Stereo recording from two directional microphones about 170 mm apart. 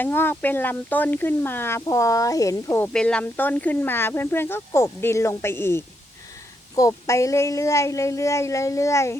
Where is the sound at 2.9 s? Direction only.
5° left (ahead or behind).